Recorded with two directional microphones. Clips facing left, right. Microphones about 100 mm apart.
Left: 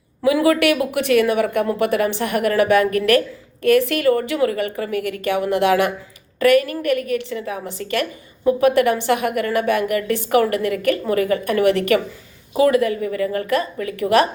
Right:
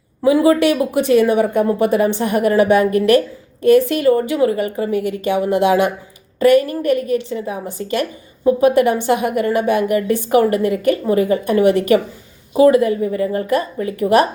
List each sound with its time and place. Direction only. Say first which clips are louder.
0.2 s a woman's voice: right 3 dB; 25° right (ahead or behind)